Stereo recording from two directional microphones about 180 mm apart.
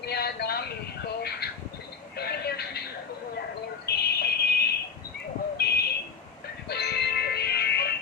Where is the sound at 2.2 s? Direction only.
65° left (ahead or behind).